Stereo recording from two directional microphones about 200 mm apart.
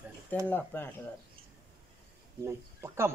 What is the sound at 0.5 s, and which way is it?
Speech, 10° left (ahead or behind).